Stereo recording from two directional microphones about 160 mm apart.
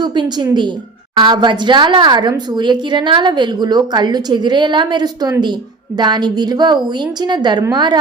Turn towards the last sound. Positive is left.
turn(degrees=-25)  # may be behind; listen again after turning